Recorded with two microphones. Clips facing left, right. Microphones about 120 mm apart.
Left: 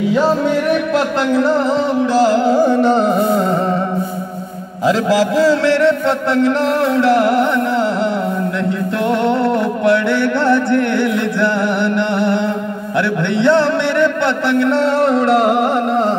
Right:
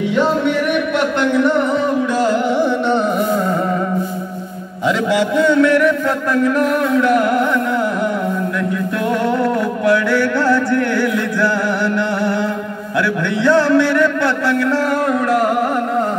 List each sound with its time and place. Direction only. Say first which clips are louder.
0.7 s a sound: left 2 dB; 35° left (ahead or behind)
2.2 s music: left 4 dB; 35° left (ahead or behind)
4.8 s mantra: left 2 dB; 35° left (ahead or behind)
9.2 s music: left 1 dB; 25° left (ahead or behind)
13.4 s mantra: right 1 dB; 25° left (ahead or behind)